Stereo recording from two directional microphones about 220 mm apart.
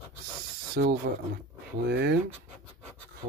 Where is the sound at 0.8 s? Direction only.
45° right (ahead or behind).